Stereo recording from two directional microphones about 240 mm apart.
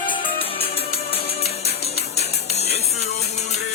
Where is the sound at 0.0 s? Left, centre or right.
Centre.